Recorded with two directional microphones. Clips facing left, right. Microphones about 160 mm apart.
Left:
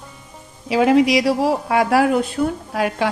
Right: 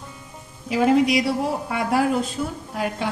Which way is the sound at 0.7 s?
85° left.